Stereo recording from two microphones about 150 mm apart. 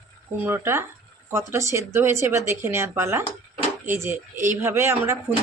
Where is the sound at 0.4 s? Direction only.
15° right (ahead or behind).